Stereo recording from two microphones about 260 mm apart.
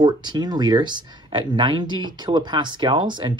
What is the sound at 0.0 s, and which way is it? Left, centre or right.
Speech, centre.